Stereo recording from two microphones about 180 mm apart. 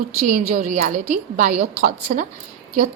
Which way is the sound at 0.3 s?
45° right (ahead or behind).